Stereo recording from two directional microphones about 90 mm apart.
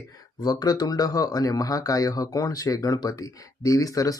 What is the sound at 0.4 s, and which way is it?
Speech, 40° left (ahead or behind).